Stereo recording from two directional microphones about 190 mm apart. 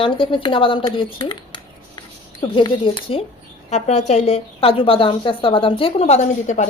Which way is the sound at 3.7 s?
35° left (ahead or behind).